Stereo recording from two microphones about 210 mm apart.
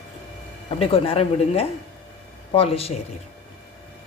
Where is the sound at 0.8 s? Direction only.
30° left (ahead or behind).